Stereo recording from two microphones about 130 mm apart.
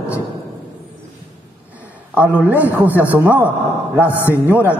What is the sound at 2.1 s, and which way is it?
A man's voice, 10° right (ahead or behind).